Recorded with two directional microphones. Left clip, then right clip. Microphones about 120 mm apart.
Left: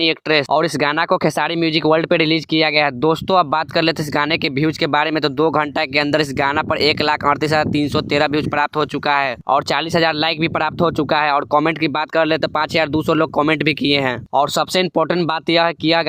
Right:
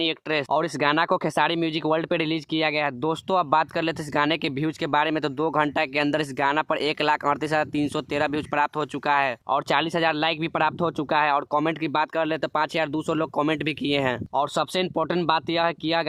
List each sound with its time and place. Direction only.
0.0 s speech: 45° left (ahead or behind)